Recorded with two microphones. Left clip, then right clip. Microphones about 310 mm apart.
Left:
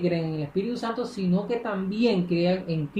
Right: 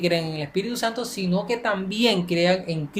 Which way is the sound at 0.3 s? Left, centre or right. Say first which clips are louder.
Right 2 dB; right.